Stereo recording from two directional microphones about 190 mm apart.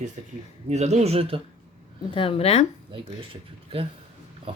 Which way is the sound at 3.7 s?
30° right (ahead or behind).